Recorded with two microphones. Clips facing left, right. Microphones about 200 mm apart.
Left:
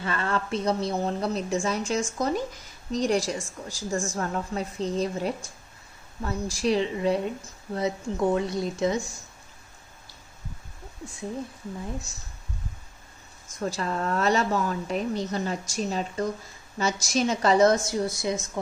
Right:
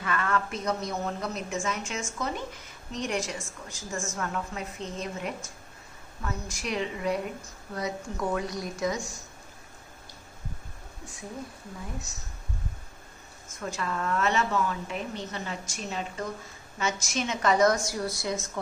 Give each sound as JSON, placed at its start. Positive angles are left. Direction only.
{"t": 0.0, "sound": "a woman's voice", "side_deg": 30}
{"t": 13.6, "sound": "a woman's voice", "side_deg": 35}